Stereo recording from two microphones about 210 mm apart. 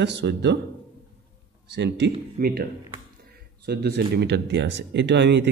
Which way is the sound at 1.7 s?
55° right (ahead or behind).